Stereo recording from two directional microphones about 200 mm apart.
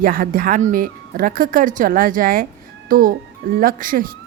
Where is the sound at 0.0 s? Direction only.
45° right (ahead or behind).